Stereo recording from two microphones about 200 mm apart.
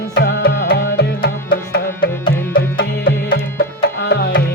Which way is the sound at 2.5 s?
50° left (ahead or behind).